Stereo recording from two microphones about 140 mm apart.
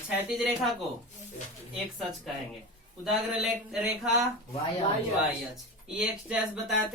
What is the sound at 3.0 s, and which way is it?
Speech, 5° right (ahead or behind).